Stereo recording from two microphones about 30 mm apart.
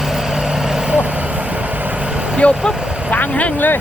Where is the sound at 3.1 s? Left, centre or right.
Left.